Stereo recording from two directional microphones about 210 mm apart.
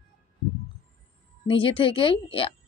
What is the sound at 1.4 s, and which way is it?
Speech, 25° left (ahead or behind).